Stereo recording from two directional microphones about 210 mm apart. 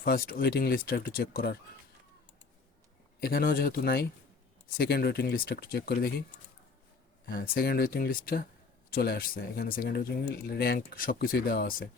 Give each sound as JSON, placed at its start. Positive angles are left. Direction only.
{"t": 0.0, "sound": "speech", "side_deg": 45}
{"t": 3.2, "sound": "speech", "side_deg": 45}
{"t": 7.3, "sound": "speech", "side_deg": 45}